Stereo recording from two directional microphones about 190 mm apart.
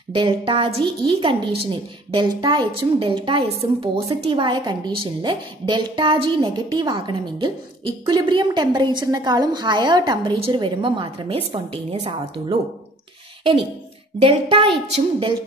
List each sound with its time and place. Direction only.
0.1 s a woman's voice: 25° right (ahead or behind)